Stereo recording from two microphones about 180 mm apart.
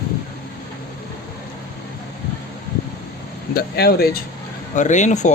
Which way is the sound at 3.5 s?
60° left (ahead or behind).